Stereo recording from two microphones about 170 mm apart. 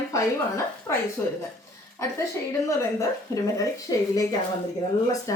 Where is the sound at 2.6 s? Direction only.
20° left (ahead or behind).